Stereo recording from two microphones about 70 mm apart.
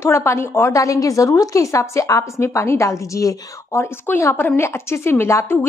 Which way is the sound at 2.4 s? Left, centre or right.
Left.